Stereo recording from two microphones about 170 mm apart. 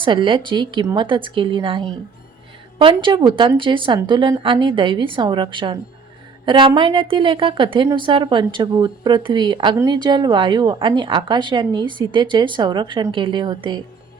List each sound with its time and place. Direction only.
0.0 s a woman's voice: 30° right (ahead or behind)